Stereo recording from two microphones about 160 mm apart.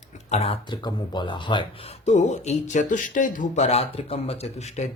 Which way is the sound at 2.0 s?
45° left (ahead or behind).